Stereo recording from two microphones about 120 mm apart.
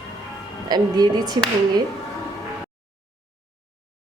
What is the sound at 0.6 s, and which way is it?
Speech, 35° right (ahead or behind).